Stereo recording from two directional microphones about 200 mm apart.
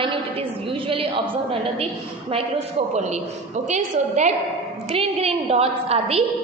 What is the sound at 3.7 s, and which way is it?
A woman's voice, 35° right (ahead or behind).